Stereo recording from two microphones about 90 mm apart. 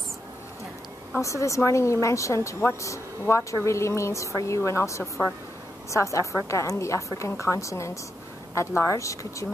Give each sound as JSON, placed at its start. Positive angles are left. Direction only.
{"t": 1.2, "sound": "a woman's voice", "side_deg": 35}